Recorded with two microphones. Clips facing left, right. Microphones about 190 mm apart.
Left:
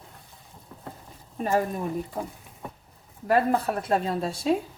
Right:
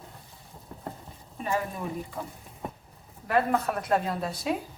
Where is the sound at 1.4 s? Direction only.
45° left (ahead or behind).